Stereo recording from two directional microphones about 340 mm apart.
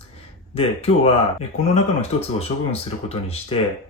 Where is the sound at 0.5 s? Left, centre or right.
Centre.